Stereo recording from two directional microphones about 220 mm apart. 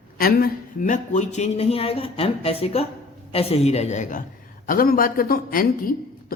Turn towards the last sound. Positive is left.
turn(degrees=40)  # may be behind; listen again after turning